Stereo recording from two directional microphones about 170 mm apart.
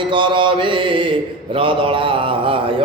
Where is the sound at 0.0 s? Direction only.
30° right (ahead or behind).